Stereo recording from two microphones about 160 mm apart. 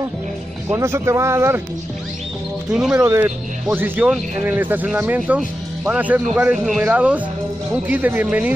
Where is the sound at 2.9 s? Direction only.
15° right (ahead or behind).